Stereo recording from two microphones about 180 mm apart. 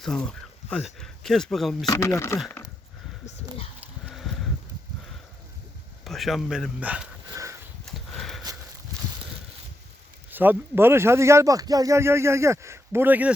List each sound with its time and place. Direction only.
0.0 s speech: 5° left (ahead or behind)
1.9 s speech: 15° left (ahead or behind)
6.1 s speech: centre (ahead or behind)
7.3 s a sound: 15° right (ahead or behind)
7.9 s a sound: centre (ahead or behind)
10.3 s speech: 10° right (ahead or behind)